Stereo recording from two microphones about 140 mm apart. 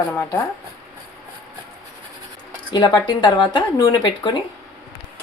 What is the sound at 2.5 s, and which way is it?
Speech, 30° left (ahead or behind).